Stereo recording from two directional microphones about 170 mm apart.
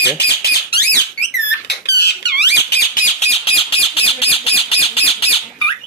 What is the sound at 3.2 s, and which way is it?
Bird, 35° left (ahead or behind).